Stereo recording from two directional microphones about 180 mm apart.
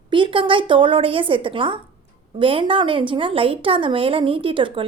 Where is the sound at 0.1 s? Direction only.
30° right (ahead or behind).